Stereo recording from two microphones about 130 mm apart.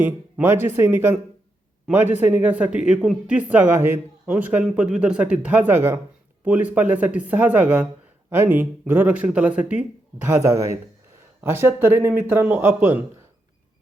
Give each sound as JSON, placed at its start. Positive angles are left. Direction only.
{"t": 0.0, "sound": "speech", "side_deg": -15}
{"t": 1.9, "sound": "speech", "side_deg": -5}
{"t": 10.2, "sound": "speech", "side_deg": -25}